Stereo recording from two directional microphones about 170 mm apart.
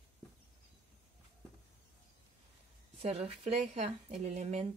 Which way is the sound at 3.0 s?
35° right (ahead or behind).